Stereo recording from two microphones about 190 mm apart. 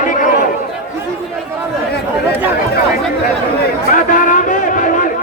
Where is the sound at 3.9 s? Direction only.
45° left (ahead or behind).